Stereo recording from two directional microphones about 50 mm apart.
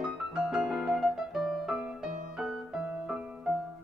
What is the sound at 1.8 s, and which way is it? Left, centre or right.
Music, centre.